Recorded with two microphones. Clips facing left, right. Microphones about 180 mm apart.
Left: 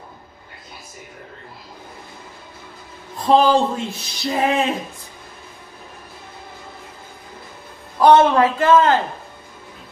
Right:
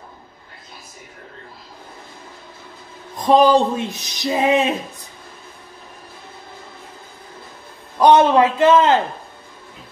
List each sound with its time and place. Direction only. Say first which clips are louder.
3.2 s speech: right 2 dB; 15° right (ahead or behind)
8.0 s a man's voice: even; 20° right (ahead or behind)